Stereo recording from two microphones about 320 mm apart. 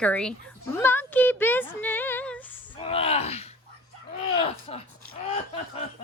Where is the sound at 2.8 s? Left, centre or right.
Centre.